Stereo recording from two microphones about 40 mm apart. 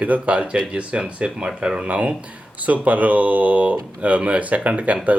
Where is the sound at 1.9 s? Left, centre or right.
Right.